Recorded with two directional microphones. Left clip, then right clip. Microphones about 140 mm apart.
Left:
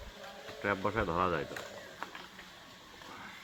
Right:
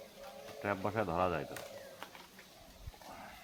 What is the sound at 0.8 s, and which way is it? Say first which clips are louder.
Speech: left 1 dB; 20° right (ahead or behind).